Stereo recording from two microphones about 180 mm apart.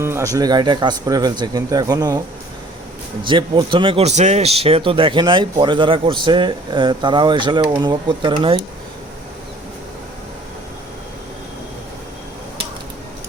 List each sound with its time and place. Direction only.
0.0 s speech: 15° right (ahead or behind)
3.2 s speech: 25° right (ahead or behind)